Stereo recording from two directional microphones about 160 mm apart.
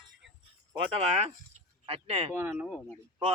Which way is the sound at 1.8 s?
35° right (ahead or behind).